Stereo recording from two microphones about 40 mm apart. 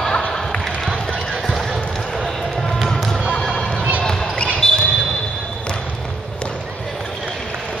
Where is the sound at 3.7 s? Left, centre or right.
Right.